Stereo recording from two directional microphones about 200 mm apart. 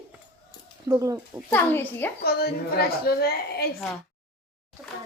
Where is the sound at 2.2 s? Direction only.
50° left (ahead or behind).